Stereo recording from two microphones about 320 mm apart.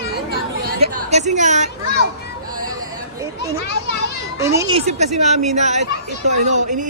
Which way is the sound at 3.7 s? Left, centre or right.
Left.